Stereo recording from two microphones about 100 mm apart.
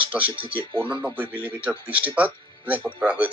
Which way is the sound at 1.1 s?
20° right (ahead or behind).